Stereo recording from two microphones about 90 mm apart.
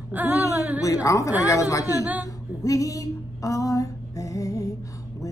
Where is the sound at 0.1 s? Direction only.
20° right (ahead or behind).